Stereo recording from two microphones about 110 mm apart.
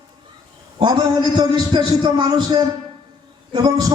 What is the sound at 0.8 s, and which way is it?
A man's voice, 45° right (ahead or behind).